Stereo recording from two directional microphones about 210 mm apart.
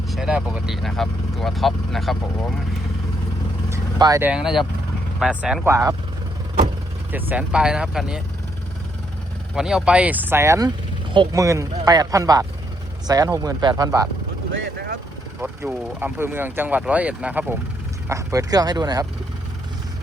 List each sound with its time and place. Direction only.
0.1 s speech: 5° right (ahead or behind)
3.7 s vehicle: 15° right (ahead or behind)
4.3 s speech: 5° right (ahead or behind)
7.1 s speech: 10° right (ahead or behind)
9.6 s speech: 5° right (ahead or behind)
14.5 s speech: 55° right (ahead or behind)
15.4 s speech: 10° right (ahead or behind)